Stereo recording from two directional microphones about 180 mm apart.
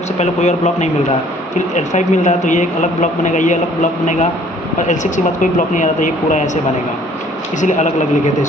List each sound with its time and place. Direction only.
0.2 s speech: 40° left (ahead or behind)
7.6 s speech: 40° left (ahead or behind)